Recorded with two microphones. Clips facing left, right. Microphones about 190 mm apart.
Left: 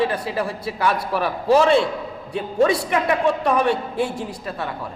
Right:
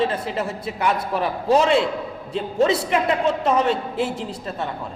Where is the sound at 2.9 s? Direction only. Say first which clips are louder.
Left 1 dB; 25° right (ahead or behind).